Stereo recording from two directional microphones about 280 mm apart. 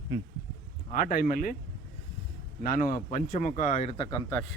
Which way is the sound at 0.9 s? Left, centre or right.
Left.